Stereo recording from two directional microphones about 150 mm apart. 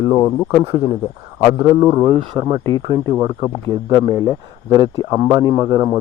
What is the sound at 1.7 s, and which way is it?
A man's voice, 20° right (ahead or behind).